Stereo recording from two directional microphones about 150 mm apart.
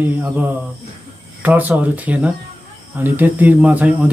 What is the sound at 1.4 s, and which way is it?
Speech, 10° right (ahead or behind).